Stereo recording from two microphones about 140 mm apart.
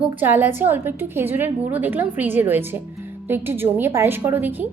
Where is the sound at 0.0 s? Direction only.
15° right (ahead or behind).